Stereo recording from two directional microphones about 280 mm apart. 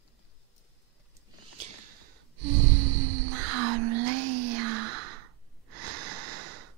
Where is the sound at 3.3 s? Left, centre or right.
Right.